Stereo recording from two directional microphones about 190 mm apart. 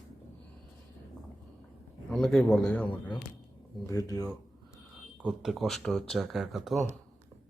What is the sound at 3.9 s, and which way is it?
Speech, 20° left (ahead or behind).